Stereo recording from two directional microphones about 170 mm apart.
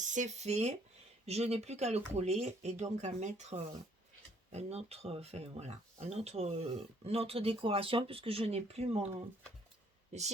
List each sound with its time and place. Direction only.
0.0 s speech: 45° right (ahead or behind)
10.1 s speech: 40° right (ahead or behind)